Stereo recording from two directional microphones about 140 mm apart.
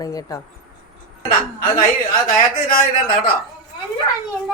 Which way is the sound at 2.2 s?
85° left.